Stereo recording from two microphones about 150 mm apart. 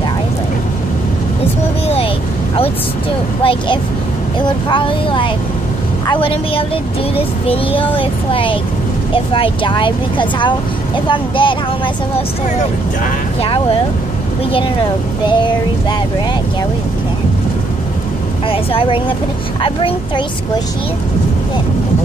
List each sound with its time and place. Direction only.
3.4 s speech: 30° left (ahead or behind)
14.5 s speech: 35° left (ahead or behind)
18.5 s speech: 35° left (ahead or behind)